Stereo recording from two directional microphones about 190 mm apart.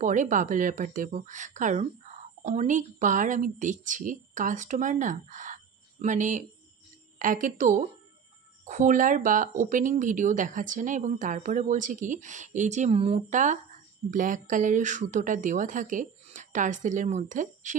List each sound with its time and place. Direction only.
0.0 s a woman's voice: 40° right (ahead or behind)